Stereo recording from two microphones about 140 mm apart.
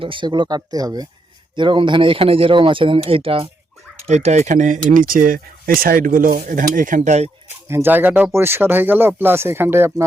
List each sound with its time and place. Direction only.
0.0 s speech: 35° right (ahead or behind)
4.0 s speech: 55° right (ahead or behind)
7.7 s speech: 15° right (ahead or behind)